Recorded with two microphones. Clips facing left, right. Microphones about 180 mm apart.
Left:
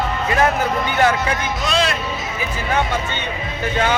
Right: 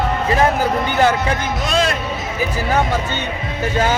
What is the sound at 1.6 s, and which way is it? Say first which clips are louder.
Speech: right 1 dB; 45° right (ahead or behind).